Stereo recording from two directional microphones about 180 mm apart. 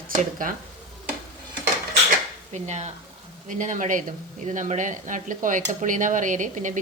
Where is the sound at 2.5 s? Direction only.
40° right (ahead or behind).